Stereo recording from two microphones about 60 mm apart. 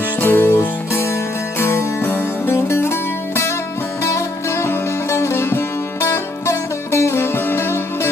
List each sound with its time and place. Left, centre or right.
0.2 s music: left
4.0 s sitar: left